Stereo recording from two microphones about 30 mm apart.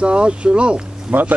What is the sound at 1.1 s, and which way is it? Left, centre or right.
Speech, right.